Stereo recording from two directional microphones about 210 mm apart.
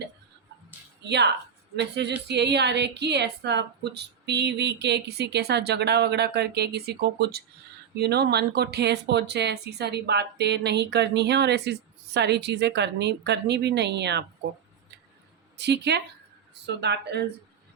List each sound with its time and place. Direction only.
1.0 s speech: 55° right (ahead or behind)
15.5 s speech: 55° right (ahead or behind)